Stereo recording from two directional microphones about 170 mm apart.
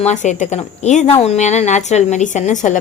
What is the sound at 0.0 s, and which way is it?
A woman's voice, 45° left (ahead or behind).